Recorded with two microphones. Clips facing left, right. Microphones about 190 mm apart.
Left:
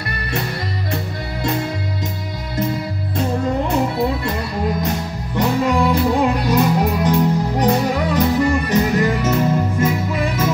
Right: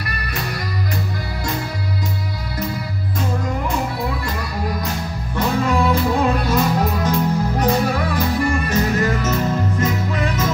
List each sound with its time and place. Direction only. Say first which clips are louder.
5.3 s music: left 2 dB; 15° left (ahead or behind)